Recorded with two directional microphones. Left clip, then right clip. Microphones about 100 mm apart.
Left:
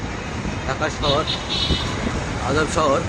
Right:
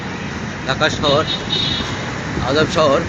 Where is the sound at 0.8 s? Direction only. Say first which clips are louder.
Right 6 dB; centre (ahead or behind).